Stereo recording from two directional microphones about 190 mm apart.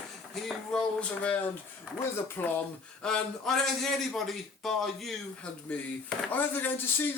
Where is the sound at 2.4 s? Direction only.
10° left (ahead or behind).